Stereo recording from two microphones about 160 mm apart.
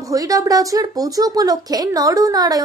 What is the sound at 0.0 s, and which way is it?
Speech, 20° right (ahead or behind).